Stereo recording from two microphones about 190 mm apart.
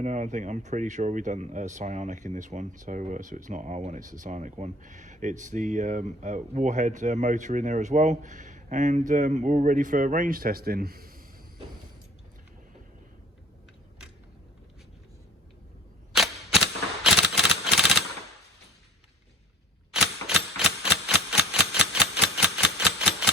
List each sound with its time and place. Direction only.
0.0 s speech: 40° right (ahead or behind)
16.1 s camera: 5° right (ahead or behind)
19.9 s cap gun: centre (ahead or behind)
21.3 s a sound: 5° right (ahead or behind)